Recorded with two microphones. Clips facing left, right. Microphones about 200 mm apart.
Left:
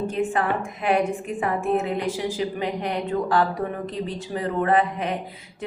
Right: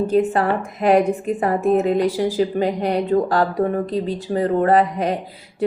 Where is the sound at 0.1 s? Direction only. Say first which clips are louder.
Right 6 dB; 40° right (ahead or behind).